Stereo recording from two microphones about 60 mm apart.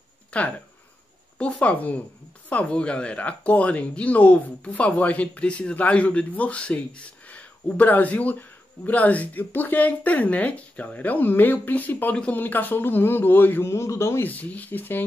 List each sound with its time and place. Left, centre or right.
0.3 s speech: centre; by 13.7 s left
13.7 s speech: left
14.2 s speech: left